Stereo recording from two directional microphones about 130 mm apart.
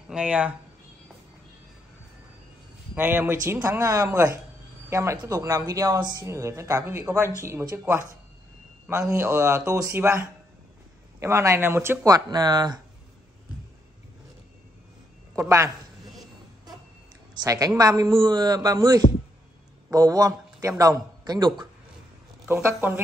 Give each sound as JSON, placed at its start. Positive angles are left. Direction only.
{"t": 0.1, "sound": "speech", "side_deg": -10}
{"t": 2.9, "sound": "speech", "side_deg": -15}
{"t": 9.1, "sound": "speech", "side_deg": -20}
{"t": 15.3, "sound": "speech", "side_deg": -20}
{"t": 17.3, "sound": "a man's voice", "side_deg": -30}
{"t": 22.5, "sound": "speech", "side_deg": -20}